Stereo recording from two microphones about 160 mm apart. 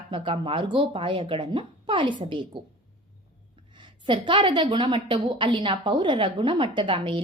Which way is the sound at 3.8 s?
30° right (ahead or behind).